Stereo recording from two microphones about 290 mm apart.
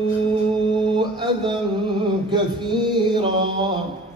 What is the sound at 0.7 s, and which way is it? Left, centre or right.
Mantra, centre.